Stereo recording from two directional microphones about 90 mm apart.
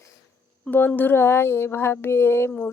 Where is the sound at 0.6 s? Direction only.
20° left (ahead or behind).